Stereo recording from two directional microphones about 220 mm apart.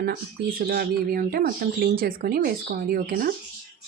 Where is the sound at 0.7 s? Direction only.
45° right (ahead or behind).